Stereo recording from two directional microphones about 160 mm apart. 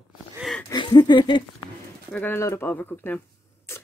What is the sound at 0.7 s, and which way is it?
Speech, 30° left (ahead or behind).